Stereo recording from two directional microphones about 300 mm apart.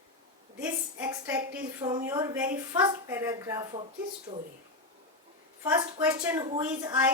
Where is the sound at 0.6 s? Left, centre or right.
Centre.